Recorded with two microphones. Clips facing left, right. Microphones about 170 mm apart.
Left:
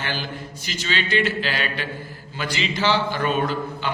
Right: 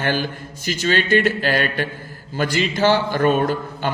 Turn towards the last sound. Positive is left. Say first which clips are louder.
# right 3 dB
turn(degrees=-45)  # may be behind; listen again after turning